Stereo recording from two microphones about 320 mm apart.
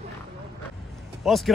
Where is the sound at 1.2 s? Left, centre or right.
Centre.